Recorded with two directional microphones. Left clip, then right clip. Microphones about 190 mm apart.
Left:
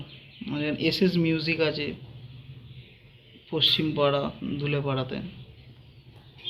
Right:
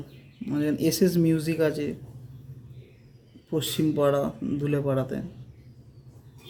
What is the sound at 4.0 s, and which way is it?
Speech, 30° right (ahead or behind).